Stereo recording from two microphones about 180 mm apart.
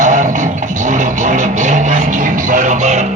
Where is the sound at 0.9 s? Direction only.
45° right (ahead or behind).